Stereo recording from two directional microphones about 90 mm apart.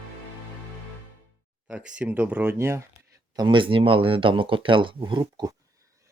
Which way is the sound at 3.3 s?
60° right (ahead or behind).